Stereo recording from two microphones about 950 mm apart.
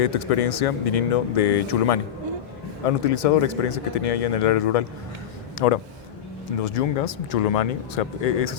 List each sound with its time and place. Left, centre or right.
0.0 s a man's voice: left